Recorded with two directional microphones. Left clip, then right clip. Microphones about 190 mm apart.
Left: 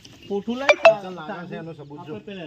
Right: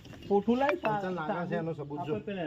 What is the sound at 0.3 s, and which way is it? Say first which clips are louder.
Cutlery: left 7 dB; 50° left (ahead or behind).